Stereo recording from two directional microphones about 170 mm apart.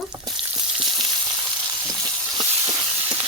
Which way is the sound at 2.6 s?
20° right (ahead or behind).